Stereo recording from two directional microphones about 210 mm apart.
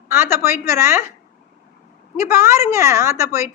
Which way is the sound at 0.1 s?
10° right (ahead or behind).